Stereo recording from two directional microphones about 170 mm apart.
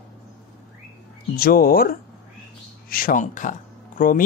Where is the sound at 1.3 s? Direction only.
60° left (ahead or behind).